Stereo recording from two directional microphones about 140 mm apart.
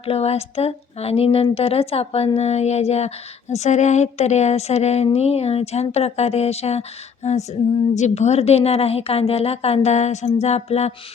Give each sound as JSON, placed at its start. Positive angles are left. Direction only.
{"t": 0.0, "sound": "speech", "side_deg": 45}